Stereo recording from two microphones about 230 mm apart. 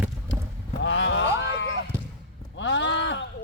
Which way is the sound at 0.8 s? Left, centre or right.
Left.